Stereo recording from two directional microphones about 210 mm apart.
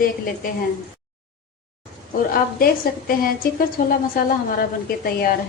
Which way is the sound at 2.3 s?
45° left (ahead or behind).